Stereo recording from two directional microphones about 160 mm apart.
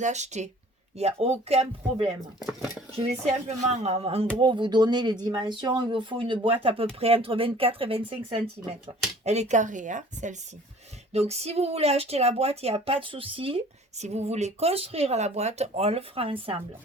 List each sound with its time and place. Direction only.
0.0 s a woman's voice: 45° right (ahead or behind)
3.4 s a woman's voice: 45° right (ahead or behind)